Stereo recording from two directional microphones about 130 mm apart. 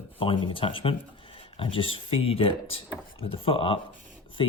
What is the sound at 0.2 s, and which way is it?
Speech, 40° left (ahead or behind).